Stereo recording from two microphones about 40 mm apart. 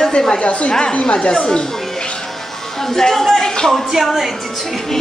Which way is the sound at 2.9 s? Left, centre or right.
Centre.